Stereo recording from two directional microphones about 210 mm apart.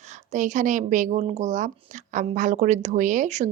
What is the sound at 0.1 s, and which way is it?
Speech, 35° right (ahead or behind).